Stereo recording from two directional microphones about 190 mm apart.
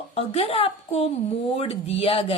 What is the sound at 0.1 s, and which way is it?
A woman's voice, 30° left (ahead or behind).